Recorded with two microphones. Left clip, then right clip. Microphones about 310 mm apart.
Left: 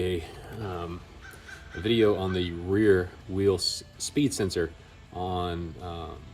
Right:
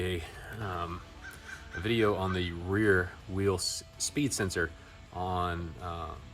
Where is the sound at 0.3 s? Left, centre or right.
Centre.